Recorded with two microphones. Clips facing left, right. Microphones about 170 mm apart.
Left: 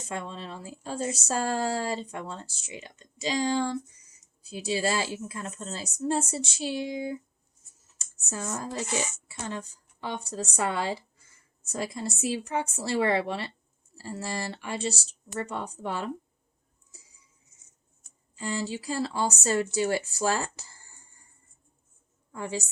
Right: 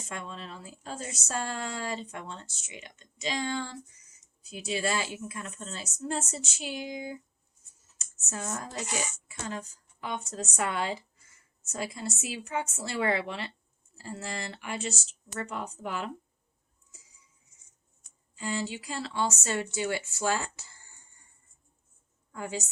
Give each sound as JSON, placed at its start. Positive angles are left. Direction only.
{"t": 0.1, "sound": "speech", "side_deg": 30}
{"t": 18.3, "sound": "speech", "side_deg": 35}
{"t": 22.4, "sound": "speech", "side_deg": 30}